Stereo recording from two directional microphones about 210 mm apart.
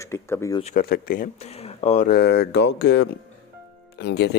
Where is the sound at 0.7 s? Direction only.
45° left (ahead or behind).